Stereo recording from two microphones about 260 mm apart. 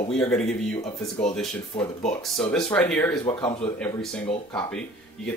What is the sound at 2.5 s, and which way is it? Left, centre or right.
Speech, centre.